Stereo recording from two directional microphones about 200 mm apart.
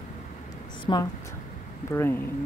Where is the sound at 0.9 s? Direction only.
20° left (ahead or behind).